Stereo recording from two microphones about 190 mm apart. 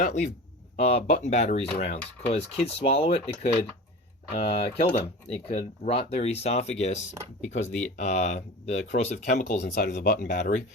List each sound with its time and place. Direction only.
0.0 s speech: 40° left (ahead or behind)
9.6 s speech: 60° left (ahead or behind); by 10.6 s 45° left (ahead or behind)